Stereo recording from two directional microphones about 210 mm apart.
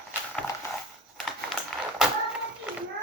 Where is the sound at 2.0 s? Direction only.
Centre (ahead or behind).